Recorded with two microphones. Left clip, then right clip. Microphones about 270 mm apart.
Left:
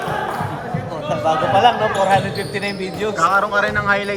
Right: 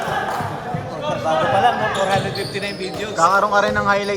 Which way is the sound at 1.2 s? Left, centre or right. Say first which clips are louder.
Left 2 dB; left.